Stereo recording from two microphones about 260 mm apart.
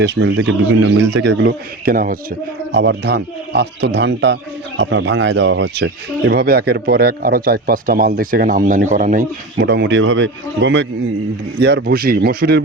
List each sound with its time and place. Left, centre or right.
0.0 s speech: right